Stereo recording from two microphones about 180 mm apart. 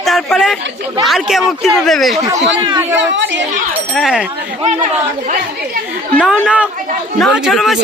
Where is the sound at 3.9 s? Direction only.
Centre (ahead or behind).